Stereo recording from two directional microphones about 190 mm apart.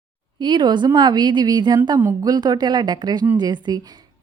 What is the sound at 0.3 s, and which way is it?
A woman's voice, 25° right (ahead or behind).